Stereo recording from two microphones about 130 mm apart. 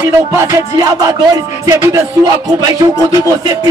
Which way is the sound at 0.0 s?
20° right (ahead or behind).